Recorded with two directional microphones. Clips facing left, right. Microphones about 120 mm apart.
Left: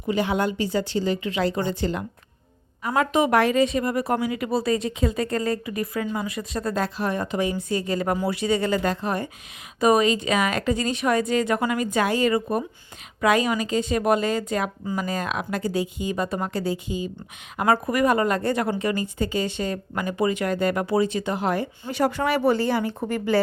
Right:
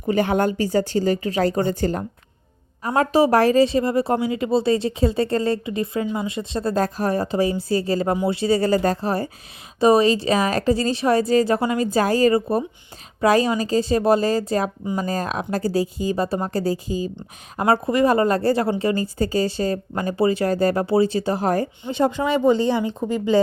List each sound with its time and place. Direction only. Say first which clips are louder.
0.0 s speech: right 4 dB; 50° right (ahead or behind)
21.8 s speech: right 2 dB; 20° right (ahead or behind)